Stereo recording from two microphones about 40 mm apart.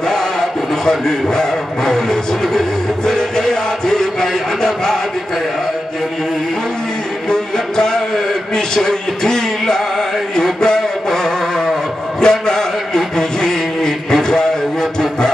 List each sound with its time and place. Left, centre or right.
1.3 s music: centre
7.2 s music: centre
12.2 s a sound: centre